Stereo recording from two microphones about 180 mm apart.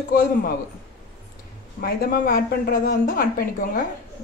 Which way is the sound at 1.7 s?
55° left (ahead or behind).